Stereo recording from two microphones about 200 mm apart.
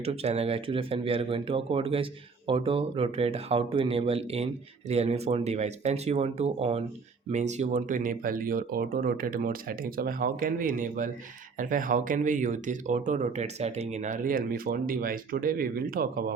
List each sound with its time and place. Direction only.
0.0 s speech: 30° right (ahead or behind); by 16.2 s 45° right (ahead or behind)